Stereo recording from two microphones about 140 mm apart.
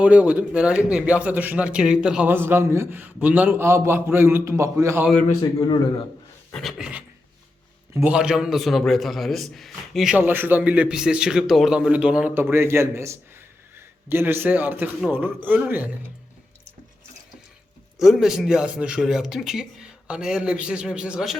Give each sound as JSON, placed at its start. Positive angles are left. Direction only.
{"t": 0.0, "sound": "a man's voice", "side_deg": -10}
{"t": 5.4, "sound": "a man's voice", "side_deg": 30}
{"t": 6.5, "sound": "speech", "side_deg": 0}
{"t": 10.2, "sound": "a man's voice", "side_deg": -15}
{"t": 18.0, "sound": "speech", "side_deg": -5}